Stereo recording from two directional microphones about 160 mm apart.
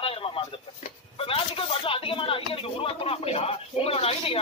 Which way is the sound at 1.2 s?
35° left (ahead or behind).